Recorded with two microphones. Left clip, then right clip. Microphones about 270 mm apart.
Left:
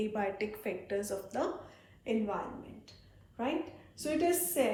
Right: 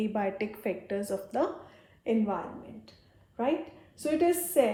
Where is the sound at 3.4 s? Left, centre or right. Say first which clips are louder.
Right 5 dB; right.